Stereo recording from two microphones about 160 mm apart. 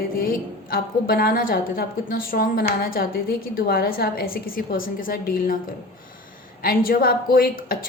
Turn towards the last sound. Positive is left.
turn(degrees=65)  # may be behind; listen again after turning